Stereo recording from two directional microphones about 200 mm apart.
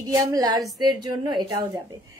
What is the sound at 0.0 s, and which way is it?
A woman's voice, 15° right (ahead or behind).